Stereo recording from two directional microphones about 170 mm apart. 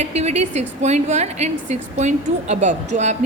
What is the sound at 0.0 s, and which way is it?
A woman's voice, 40° right (ahead or behind).